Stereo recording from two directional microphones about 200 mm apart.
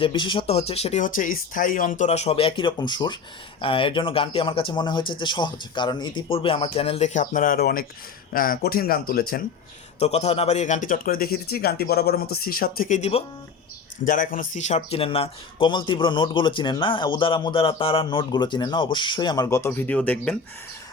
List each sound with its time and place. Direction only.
0.0 s speech: 25° left (ahead or behind); by 9.4 s 50° left (ahead or behind)
10.0 s speech: 30° left (ahead or behind)
14.8 s speech: 30° left (ahead or behind); by 20.3 s 5° left (ahead or behind)